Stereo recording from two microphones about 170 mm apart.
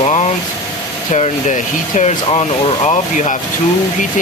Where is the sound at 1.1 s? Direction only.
40° left (ahead or behind).